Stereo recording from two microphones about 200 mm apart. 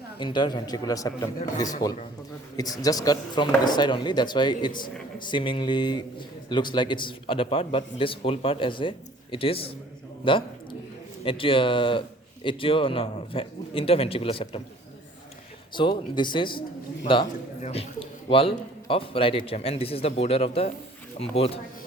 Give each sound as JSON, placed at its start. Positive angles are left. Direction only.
{"t": 0.2, "sound": "a man's voice", "side_deg": 25}
{"t": 15.7, "sound": "a man's voice", "side_deg": 25}